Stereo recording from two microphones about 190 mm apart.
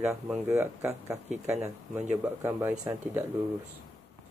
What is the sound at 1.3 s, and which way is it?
Speech, 35° right (ahead or behind).